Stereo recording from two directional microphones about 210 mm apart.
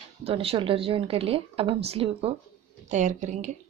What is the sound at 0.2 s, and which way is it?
A woman's voice, 30° right (ahead or behind).